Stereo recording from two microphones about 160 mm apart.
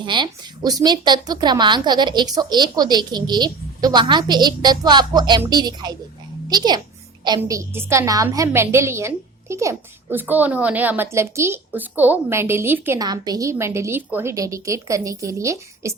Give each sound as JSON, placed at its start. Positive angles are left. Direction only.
{"t": 0.0, "sound": "a woman's voice", "side_deg": -30}
{"t": 13.0, "sound": "a woman's voice", "side_deg": -25}